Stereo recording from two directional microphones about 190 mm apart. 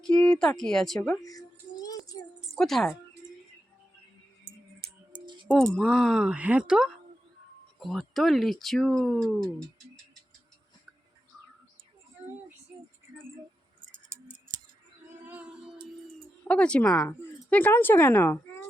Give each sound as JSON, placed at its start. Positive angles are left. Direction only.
{"t": 0.0, "sound": "speech", "side_deg": 5}
{"t": 1.2, "sound": "child singing", "side_deg": 20}
{"t": 2.6, "sound": "speech", "side_deg": 0}
{"t": 5.7, "sound": "speech", "side_deg": 0}
{"t": 14.1, "sound": "tick-tock", "side_deg": -45}
{"t": 15.3, "sound": "music", "side_deg": -5}
{"t": 16.4, "sound": "speech", "side_deg": 5}